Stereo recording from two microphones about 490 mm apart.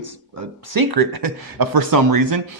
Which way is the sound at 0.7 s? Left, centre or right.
Right.